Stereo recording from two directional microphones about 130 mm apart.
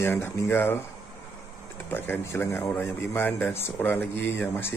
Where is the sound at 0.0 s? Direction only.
15° left (ahead or behind).